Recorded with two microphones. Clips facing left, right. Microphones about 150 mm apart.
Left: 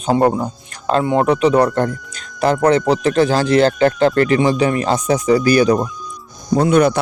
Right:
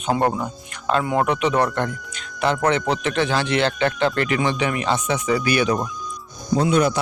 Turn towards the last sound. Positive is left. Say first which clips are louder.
# left 5 dB
turn(degrees=60)  # may be behind; listen again after turning